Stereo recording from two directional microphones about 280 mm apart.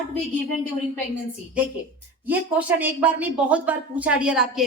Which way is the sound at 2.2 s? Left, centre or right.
Centre.